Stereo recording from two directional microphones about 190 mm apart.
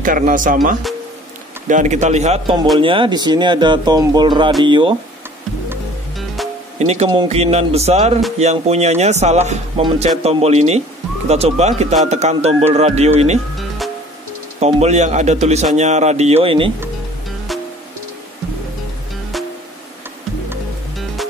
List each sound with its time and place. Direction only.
0.0 s speech: 45° right (ahead or behind); by 4.9 s 25° right (ahead or behind)
6.1 s music: centre (ahead or behind)
6.9 s speech: 35° right (ahead or behind)
14.6 s speech: 35° right (ahead or behind)